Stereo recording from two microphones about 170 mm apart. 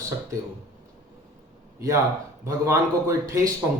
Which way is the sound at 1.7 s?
15° right (ahead or behind).